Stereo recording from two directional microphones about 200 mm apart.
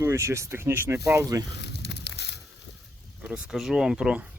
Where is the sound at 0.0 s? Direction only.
15° right (ahead or behind).